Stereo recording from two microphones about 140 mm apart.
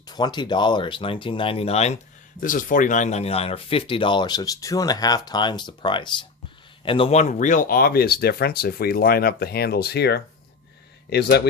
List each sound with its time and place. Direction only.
0.1 s speech: 30° left (ahead or behind); by 2.0 s 50° left (ahead or behind)
2.4 s speech: 70° left (ahead or behind); by 10.2 s 90° left